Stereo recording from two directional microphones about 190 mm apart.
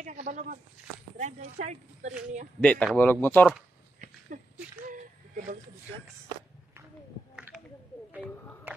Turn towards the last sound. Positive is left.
turn(degrees=-5)  # may be behind; listen again after turning